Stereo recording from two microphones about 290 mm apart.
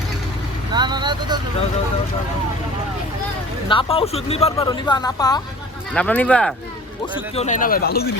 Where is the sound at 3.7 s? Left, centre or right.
Centre.